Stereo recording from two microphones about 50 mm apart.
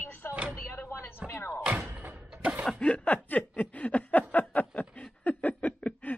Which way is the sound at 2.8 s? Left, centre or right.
Left.